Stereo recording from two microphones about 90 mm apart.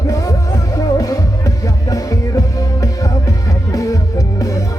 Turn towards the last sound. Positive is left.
turn(degrees=40)  # may be behind; listen again after turning